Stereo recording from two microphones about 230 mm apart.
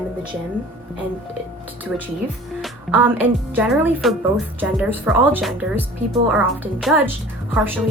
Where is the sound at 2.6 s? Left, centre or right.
Centre.